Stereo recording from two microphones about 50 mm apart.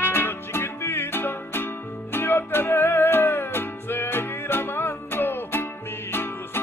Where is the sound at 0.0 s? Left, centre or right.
Left.